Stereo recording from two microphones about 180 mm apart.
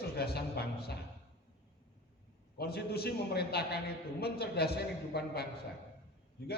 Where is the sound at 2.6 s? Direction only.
60° left (ahead or behind).